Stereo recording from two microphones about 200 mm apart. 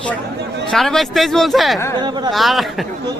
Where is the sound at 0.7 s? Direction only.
Centre (ahead or behind).